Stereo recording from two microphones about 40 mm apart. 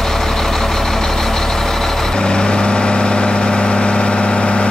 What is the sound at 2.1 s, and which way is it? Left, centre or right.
Vehicle, left.